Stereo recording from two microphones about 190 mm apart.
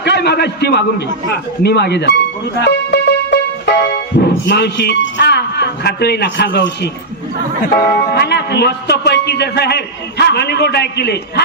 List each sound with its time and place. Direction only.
0.0 s a man's voice: 60° left (ahead or behind)
2.6 s music: 65° left (ahead or behind)
4.2 s a man's voice: 60° left (ahead or behind)
8.1 s a man's voice: 60° left (ahead or behind)